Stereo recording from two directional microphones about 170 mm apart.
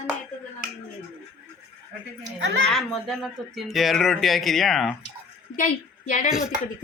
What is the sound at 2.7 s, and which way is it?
Speech, centre (ahead or behind).